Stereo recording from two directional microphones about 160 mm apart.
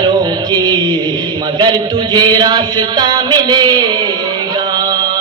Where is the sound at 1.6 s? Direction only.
25° right (ahead or behind).